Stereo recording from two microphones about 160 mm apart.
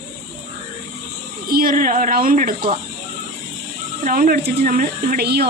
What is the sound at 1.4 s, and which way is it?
Speech, 65° right (ahead or behind).